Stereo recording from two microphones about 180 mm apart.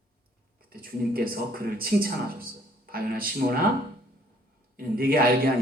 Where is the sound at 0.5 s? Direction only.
55° right (ahead or behind).